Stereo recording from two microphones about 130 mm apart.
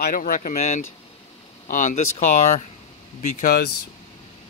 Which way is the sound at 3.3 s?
90° left.